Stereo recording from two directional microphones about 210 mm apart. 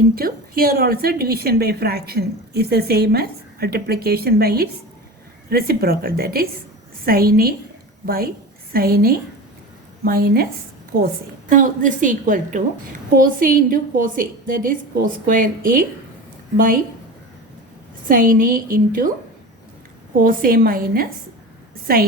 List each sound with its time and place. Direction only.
0.2 s a woman's voice: 45° right (ahead or behind)
18.1 s a woman's voice: 40° right (ahead or behind)
20.2 s a woman's voice: 45° right (ahead or behind)